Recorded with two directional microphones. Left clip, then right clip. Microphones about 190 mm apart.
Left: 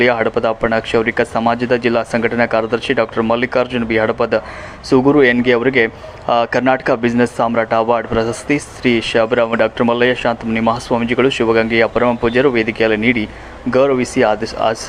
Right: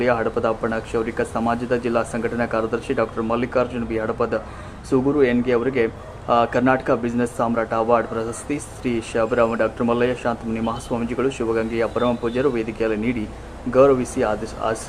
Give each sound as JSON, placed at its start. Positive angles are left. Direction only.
{"t": 0.0, "sound": "speech", "side_deg": 15}